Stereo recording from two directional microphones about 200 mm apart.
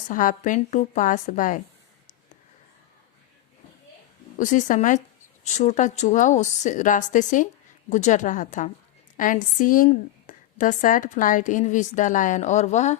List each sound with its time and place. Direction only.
0.1 s a woman's voice: 40° left (ahead or behind)
4.4 s a woman's voice: 40° left (ahead or behind)